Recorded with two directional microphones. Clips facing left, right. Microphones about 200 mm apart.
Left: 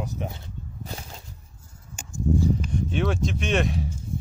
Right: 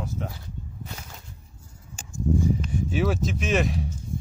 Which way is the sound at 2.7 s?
5° right (ahead or behind).